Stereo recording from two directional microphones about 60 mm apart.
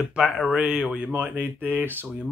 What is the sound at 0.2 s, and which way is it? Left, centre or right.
Speech, centre.